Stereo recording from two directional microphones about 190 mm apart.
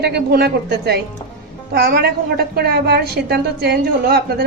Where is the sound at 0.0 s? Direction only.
55° right (ahead or behind).